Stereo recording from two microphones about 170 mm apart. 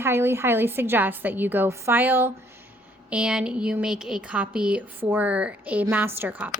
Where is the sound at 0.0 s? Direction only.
15° right (ahead or behind).